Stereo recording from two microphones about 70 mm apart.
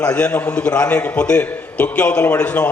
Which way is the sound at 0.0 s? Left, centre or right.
Left.